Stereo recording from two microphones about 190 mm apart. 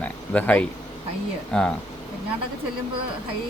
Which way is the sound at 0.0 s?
10° left (ahead or behind).